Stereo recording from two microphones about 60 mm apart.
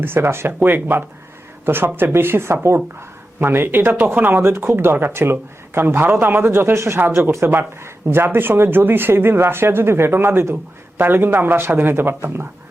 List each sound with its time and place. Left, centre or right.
0.0 s speech: right